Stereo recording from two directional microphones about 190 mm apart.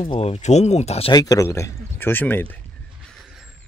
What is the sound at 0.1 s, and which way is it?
Speech, 30° left (ahead or behind).